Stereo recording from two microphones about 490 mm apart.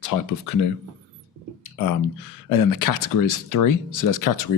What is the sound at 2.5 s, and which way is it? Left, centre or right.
Speech, left.